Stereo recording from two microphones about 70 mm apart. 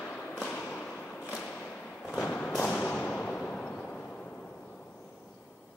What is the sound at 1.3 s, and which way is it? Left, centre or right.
Thump, centre.